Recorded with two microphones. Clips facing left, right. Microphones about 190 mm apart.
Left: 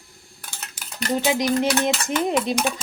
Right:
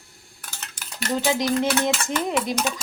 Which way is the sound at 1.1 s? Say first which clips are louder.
Left 1 dB; 20° left (ahead or behind).